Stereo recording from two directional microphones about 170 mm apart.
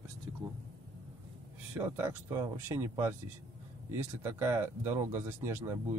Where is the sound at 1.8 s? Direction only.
15° right (ahead or behind).